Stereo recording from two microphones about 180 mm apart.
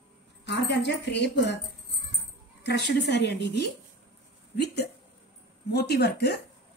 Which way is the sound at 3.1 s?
70° left (ahead or behind).